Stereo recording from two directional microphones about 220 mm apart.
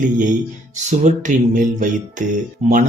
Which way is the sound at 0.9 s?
35° right (ahead or behind).